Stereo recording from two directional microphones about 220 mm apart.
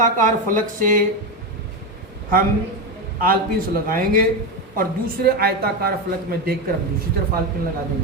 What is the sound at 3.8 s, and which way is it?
A man's voice, 40° right (ahead or behind).